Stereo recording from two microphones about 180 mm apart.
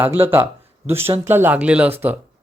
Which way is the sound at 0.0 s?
10° right (ahead or behind).